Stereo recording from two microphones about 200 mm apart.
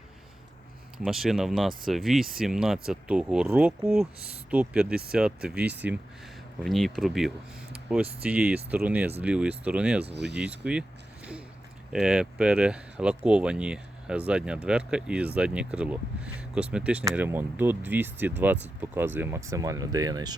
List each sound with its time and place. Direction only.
1.0 s speech: centre (ahead or behind)
11.9 s speech: 5° right (ahead or behind); by 20.3 s 20° right (ahead or behind)